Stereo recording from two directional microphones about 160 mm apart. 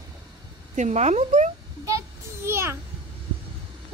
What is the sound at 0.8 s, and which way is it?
Speech, 45° right (ahead or behind).